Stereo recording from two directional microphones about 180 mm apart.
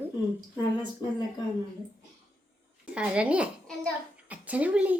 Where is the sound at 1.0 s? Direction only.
20° left (ahead or behind).